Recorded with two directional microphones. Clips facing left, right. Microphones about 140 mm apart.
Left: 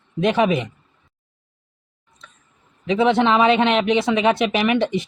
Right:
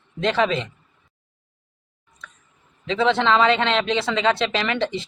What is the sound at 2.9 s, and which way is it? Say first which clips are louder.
Speech: left 3 dB; 20° left (ahead or behind).